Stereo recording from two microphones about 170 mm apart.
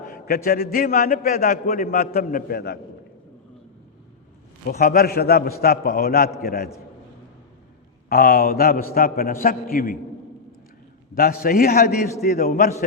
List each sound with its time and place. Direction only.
0.1 s a man's voice: 60° left (ahead or behind)
4.6 s a man's voice: 60° left (ahead or behind)
8.1 s a man's voice: 60° left (ahead or behind)
11.1 s a man's voice: 60° left (ahead or behind)